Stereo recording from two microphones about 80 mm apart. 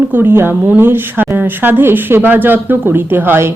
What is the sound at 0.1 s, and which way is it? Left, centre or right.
A woman's voice, right.